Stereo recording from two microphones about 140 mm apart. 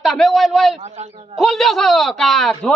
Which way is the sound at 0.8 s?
50° right (ahead or behind).